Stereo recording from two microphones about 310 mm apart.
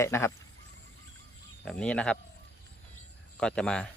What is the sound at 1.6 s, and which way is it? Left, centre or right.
Speech, centre.